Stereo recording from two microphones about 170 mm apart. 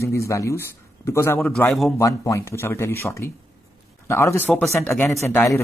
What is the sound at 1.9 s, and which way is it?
Speech, 20° left (ahead or behind).